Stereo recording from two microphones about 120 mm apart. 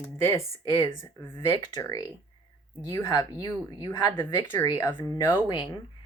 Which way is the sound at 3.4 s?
35° left (ahead or behind).